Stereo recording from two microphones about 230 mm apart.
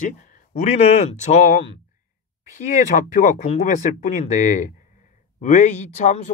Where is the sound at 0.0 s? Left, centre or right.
Left.